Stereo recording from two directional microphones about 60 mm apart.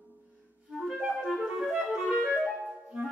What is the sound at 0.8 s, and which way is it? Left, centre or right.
Clarinet, centre.